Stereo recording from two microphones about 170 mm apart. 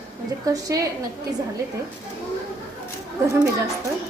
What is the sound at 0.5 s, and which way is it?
Speech, 20° right (ahead or behind).